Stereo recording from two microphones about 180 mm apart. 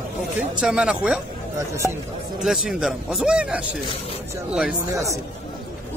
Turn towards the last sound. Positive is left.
turn(degrees=-5)  # may be behind; listen again after turning